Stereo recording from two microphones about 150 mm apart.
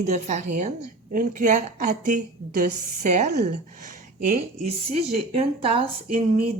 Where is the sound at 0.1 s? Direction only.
55° right (ahead or behind).